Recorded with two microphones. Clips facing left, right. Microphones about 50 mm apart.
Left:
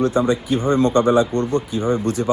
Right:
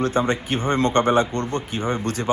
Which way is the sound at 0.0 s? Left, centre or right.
Right.